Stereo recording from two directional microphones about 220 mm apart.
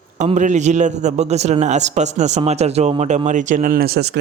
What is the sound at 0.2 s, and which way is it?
A man's voice, 35° right (ahead or behind).